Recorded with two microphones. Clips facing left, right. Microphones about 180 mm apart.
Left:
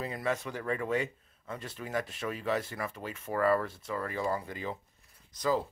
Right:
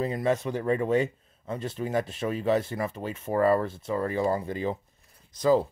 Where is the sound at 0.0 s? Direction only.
25° right (ahead or behind).